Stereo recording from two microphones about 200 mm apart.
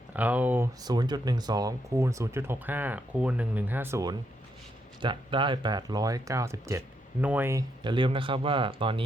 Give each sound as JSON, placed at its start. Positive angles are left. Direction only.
{"t": 0.1, "sound": "speech", "side_deg": -10}
{"t": 4.9, "sound": "speech", "side_deg": -25}